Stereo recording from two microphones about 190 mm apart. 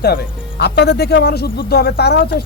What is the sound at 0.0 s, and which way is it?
A man's voice, 55° left (ahead or behind).